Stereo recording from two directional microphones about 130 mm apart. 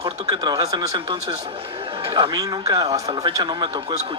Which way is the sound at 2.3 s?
25° right (ahead or behind).